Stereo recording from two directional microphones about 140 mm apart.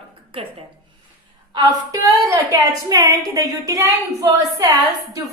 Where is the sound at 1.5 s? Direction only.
25° right (ahead or behind).